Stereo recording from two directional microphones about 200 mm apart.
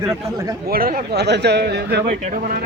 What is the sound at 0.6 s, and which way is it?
A man's voice, 50° right (ahead or behind).